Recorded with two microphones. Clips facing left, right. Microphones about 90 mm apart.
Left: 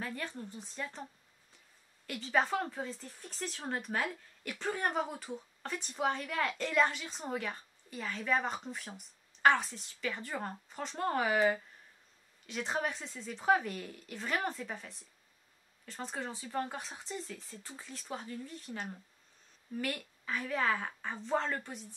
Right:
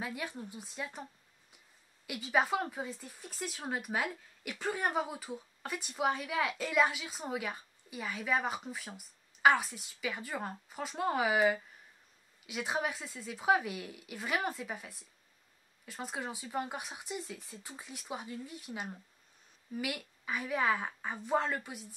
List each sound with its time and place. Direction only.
0.0 s speech: 10° right (ahead or behind)
2.0 s speech: 10° right (ahead or behind)